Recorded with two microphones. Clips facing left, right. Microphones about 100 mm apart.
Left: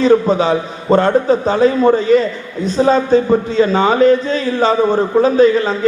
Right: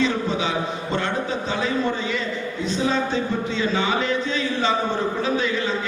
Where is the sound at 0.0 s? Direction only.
40° left (ahead or behind).